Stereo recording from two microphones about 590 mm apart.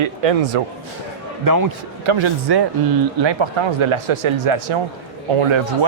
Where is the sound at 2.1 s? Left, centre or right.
Right.